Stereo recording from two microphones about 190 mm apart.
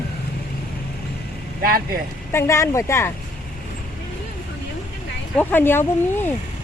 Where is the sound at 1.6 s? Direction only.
50° right (ahead or behind).